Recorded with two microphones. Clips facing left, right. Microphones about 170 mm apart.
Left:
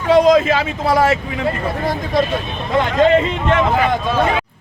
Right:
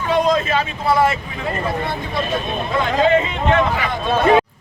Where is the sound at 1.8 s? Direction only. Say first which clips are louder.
Left 6 dB; 40° left (ahead or behind).